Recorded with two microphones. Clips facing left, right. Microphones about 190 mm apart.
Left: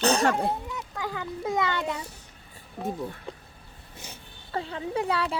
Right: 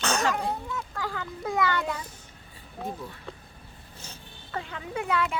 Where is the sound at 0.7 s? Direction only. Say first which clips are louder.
Even; 15° left (ahead or behind).